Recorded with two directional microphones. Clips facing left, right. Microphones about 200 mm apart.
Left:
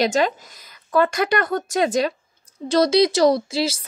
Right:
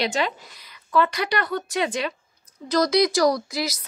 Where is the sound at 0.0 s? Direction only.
45° left (ahead or behind).